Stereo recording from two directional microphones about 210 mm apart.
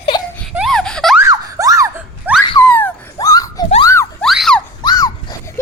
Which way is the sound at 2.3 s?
10° right (ahead or behind).